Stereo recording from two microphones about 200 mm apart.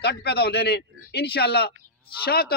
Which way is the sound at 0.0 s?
55° left (ahead or behind).